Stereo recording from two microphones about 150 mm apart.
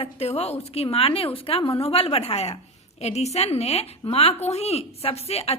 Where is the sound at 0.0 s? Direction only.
45° left (ahead or behind).